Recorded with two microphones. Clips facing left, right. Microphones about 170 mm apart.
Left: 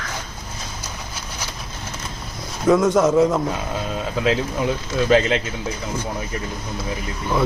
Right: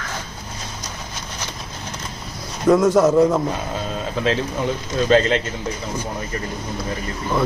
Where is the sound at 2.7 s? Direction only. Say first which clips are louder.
Right 1 dB; centre (ahead or behind).